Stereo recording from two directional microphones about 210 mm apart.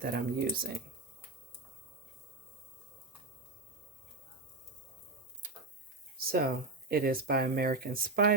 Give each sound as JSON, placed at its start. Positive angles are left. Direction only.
{"t": 0.0, "sound": "speech", "side_deg": -45}
{"t": 6.1, "sound": "speech", "side_deg": -45}